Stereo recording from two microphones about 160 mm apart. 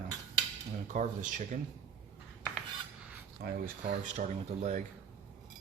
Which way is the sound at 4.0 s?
50° right (ahead or behind).